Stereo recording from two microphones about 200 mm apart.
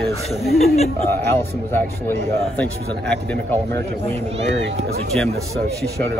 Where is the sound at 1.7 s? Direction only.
10° left (ahead or behind).